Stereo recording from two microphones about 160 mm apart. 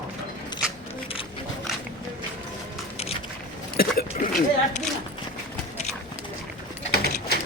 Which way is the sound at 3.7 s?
65° left (ahead or behind).